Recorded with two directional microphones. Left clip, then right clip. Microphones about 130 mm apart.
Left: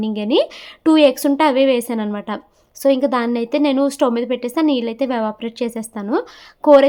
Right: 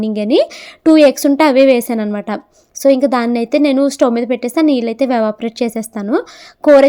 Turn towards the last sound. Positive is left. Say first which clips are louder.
# right 3 dB
turn(degrees=-30)  # may be behind; listen again after turning